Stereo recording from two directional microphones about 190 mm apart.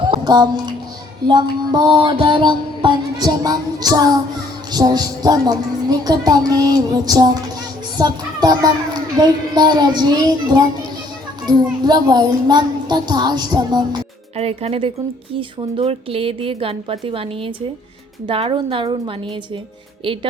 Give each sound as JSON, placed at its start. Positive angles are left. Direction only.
{"t": 0.0, "sound": "music", "side_deg": -25}
{"t": 1.3, "sound": "speech", "side_deg": -20}
{"t": 14.3, "sound": "speech", "side_deg": -30}